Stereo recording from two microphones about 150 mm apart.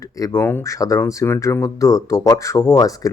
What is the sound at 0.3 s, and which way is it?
Speech, 20° left (ahead or behind).